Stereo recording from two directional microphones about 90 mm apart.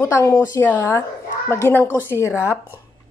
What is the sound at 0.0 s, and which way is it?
Speech, 30° left (ahead or behind).